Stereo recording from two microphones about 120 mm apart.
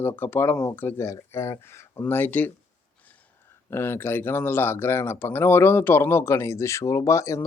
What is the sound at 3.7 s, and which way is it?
Speech, 20° left (ahead or behind).